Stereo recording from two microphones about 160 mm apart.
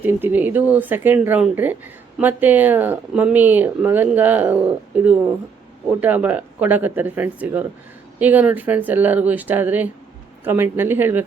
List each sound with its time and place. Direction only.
0.0 s speech: 10° right (ahead or behind)